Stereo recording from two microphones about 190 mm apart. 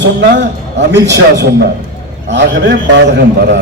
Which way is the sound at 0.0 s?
65° right (ahead or behind).